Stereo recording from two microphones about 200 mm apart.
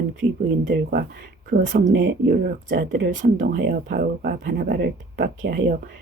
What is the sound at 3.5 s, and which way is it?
Speech, 55° right (ahead or behind).